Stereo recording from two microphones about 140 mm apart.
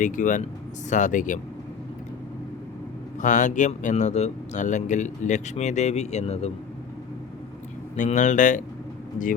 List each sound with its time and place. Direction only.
0.0 s speech: 65° left (ahead or behind)
3.2 s speech: 65° left (ahead or behind); by 6.5 s 50° left (ahead or behind)
7.9 s speech: 65° left (ahead or behind)